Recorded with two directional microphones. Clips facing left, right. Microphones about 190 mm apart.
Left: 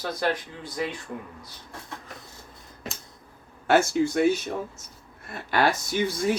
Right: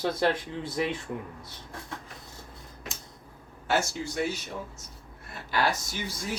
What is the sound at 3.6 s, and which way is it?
Speech, 55° left (ahead or behind).